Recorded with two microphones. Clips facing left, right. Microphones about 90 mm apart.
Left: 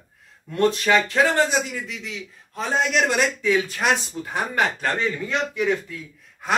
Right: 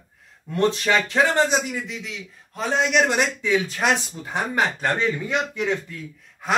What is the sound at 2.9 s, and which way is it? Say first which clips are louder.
A man's voice: right 1 dB; 20° right (ahead or behind).